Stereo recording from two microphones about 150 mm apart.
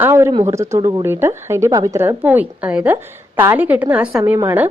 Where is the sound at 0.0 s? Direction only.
15° right (ahead or behind).